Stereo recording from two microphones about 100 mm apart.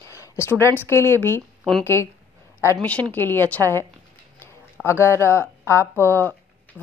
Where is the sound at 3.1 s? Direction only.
20° left (ahead or behind).